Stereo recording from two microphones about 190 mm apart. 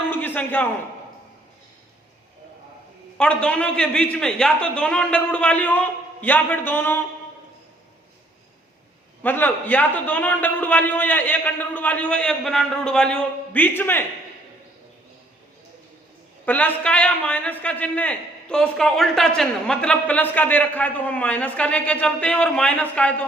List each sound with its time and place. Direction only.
0.1 s a sound: 10° left (ahead or behind)
3.2 s a man's voice: 5° left (ahead or behind)
9.2 s a man's voice: 10° left (ahead or behind)
16.5 s a man's voice: 10° left (ahead or behind)